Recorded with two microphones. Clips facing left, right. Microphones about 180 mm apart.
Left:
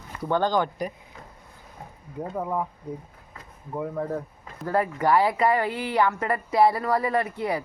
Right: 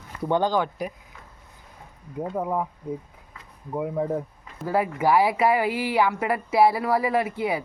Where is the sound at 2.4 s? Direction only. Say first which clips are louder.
Right 1 dB; 10° right (ahead or behind).